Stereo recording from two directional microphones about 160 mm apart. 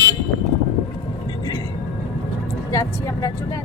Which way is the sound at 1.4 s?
25° left (ahead or behind).